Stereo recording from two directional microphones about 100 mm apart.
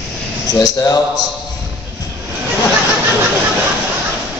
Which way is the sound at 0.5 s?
40° left (ahead or behind).